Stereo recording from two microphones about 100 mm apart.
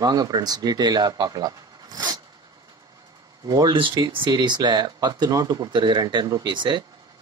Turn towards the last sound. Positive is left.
turn(degrees=-50)  # may be behind; listen again after turning